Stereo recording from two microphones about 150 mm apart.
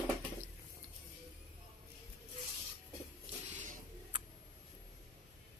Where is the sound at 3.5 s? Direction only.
60° right (ahead or behind).